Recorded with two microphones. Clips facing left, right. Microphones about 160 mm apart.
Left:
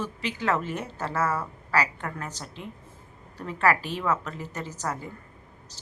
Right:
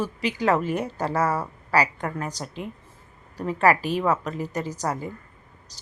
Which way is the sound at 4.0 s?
35° right (ahead or behind).